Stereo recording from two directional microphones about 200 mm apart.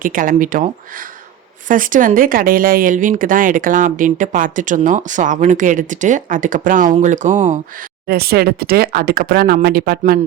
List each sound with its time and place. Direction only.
0.0 s speech: 45° right (ahead or behind)
8.0 s speech: 50° right (ahead or behind)